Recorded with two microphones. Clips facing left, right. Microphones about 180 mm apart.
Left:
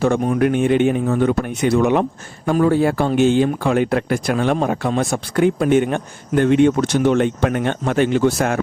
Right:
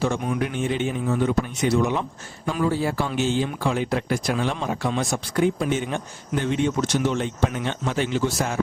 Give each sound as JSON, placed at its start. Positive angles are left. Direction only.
{"t": 0.0, "sound": "speech", "side_deg": 55}